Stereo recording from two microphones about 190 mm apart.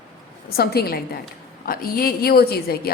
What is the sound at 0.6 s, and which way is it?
A woman's voice, 55° left (ahead or behind).